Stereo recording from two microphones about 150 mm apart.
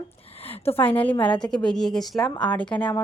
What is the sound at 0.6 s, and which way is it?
A woman's voice, 15° left (ahead or behind).